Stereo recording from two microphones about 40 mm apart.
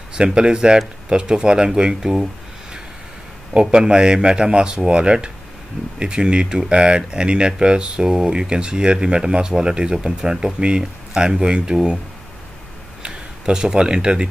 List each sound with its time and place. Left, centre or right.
0.1 s speech: right
3.5 s speech: right
13.0 s speech: centre